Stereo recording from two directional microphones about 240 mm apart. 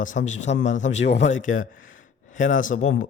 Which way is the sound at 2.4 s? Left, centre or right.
Left.